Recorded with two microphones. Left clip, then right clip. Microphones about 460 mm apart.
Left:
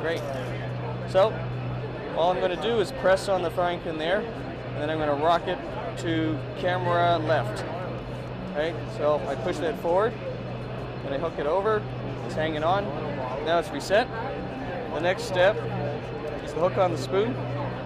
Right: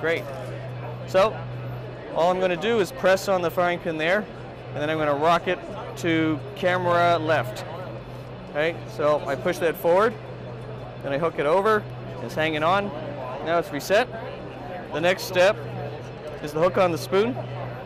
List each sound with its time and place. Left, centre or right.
1.1 s speech: right
8.5 s speech: right
16.5 s speech: right